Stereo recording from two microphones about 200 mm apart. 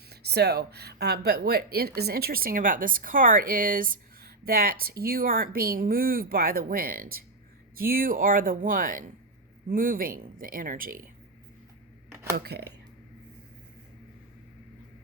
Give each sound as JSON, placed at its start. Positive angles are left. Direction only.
{"t": 0.1, "sound": "speech", "side_deg": -55}
{"t": 12.1, "sound": "a sound", "side_deg": -10}
{"t": 12.4, "sound": "speech", "side_deg": -55}